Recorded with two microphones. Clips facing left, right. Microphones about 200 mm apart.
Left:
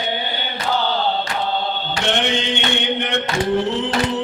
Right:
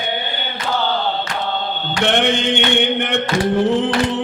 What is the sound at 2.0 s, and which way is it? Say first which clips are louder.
Mantra: right 5 dB; 55° right (ahead or behind).